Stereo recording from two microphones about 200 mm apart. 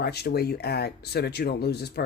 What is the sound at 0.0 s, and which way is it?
Speech, 55° left (ahead or behind).